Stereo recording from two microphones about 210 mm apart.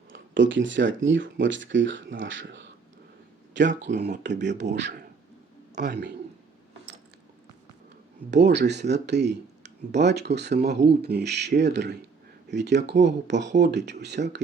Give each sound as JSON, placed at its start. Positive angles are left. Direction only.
{"t": 0.1, "sound": "a man's voice", "side_deg": -60}
{"t": 8.3, "sound": "speech", "side_deg": -55}